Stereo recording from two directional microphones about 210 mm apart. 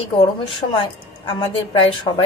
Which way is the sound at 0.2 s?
25° left (ahead or behind).